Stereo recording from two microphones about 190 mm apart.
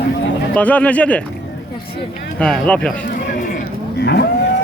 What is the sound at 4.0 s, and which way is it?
Cattle, 60° left (ahead or behind).